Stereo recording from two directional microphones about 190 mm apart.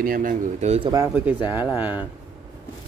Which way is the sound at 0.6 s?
35° right (ahead or behind).